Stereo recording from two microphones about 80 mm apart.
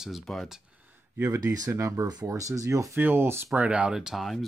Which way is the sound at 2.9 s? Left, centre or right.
Right.